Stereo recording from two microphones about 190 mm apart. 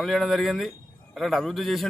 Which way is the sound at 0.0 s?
Centre (ahead or behind).